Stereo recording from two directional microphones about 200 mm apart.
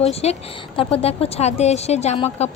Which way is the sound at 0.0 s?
30° left (ahead or behind).